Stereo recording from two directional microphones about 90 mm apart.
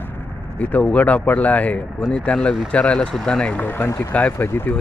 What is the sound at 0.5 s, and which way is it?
Speech, 15° left (ahead or behind).